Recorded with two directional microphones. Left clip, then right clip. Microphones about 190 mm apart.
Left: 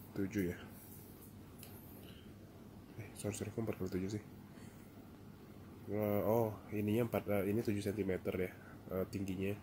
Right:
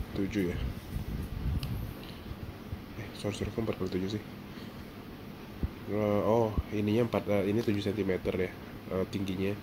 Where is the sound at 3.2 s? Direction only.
40° left (ahead or behind).